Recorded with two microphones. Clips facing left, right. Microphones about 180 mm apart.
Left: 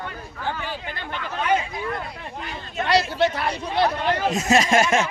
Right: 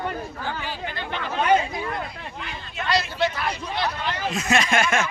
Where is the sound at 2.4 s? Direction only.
45° left (ahead or behind).